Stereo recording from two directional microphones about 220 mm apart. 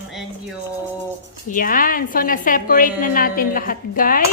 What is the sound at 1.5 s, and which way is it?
A woman's voice, 40° left (ahead or behind).